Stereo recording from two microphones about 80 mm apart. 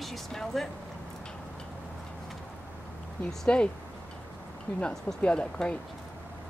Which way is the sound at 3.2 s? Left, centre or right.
Centre.